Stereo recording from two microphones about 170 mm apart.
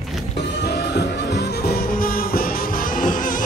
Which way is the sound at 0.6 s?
75° left (ahead or behind).